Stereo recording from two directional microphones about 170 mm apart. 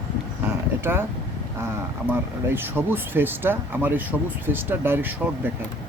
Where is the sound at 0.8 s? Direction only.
15° right (ahead or behind).